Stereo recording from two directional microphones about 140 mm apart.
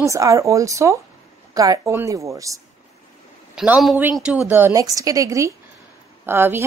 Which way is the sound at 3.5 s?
5° right (ahead or behind).